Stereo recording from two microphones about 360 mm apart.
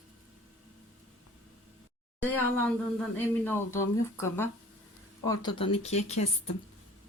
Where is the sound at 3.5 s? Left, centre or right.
Centre.